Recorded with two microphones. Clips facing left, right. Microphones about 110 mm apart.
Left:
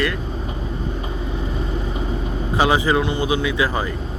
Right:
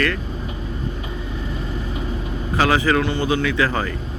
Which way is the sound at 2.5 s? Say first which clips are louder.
Even; 15° left (ahead or behind).